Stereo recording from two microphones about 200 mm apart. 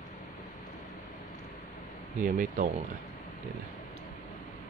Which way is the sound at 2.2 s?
40° right (ahead or behind).